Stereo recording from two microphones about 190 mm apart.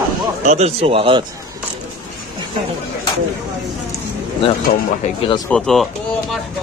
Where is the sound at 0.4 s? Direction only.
35° right (ahead or behind).